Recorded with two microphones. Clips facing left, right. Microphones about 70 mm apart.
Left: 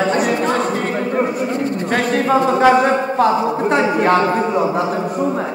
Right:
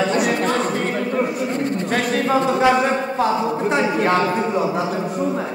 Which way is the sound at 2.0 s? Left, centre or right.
Left.